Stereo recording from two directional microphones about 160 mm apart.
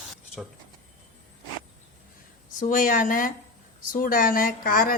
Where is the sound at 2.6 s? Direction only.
60° left (ahead or behind).